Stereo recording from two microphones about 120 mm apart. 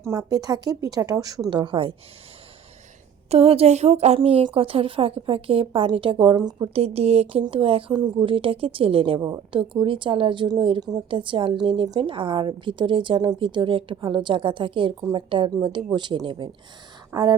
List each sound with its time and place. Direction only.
0.0 s a woman's voice: 30° right (ahead or behind)
3.2 s a woman's voice: 55° right (ahead or behind); by 6.7 s 35° right (ahead or behind)
6.7 s speech: 60° right (ahead or behind)
7.4 s a woman's voice: 50° right (ahead or behind)